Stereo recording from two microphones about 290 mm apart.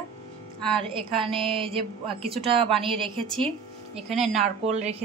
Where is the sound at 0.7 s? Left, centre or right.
Centre.